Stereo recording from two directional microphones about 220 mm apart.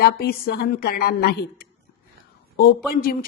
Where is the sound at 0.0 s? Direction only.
45° left (ahead or behind).